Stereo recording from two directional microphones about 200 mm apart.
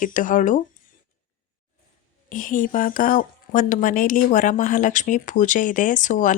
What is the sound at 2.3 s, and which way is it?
A woman's voice, 40° left (ahead or behind).